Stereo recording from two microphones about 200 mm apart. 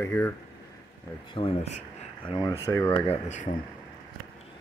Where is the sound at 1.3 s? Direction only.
25° left (ahead or behind).